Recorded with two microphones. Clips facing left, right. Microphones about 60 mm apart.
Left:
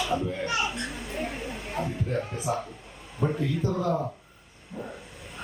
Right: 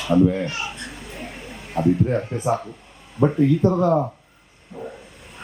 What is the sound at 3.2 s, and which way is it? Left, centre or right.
Speech, right.